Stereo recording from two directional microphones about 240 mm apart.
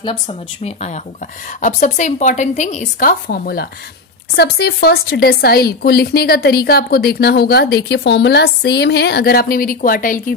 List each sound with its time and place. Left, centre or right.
0.0 s speech: left